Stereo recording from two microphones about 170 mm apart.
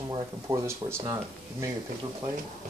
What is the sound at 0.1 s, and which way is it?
Speech, 20° right (ahead or behind).